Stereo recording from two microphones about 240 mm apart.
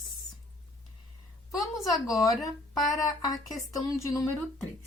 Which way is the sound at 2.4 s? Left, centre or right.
Centre.